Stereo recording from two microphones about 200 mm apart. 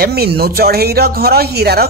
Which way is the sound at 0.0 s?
50° right (ahead or behind).